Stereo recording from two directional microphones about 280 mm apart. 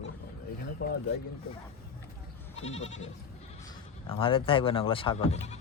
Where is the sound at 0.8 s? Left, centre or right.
Left.